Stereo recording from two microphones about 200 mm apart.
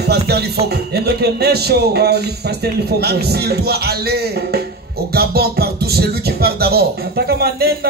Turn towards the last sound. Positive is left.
turn(degrees=-50)  # may be behind; listen again after turning